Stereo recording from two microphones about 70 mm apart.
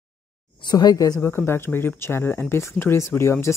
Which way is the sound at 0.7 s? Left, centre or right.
Left.